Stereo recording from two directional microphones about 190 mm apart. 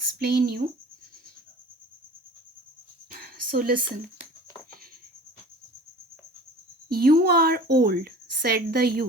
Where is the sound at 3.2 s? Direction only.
55° right (ahead or behind).